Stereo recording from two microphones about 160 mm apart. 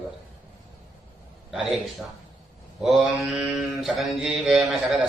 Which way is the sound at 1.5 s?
5° right (ahead or behind).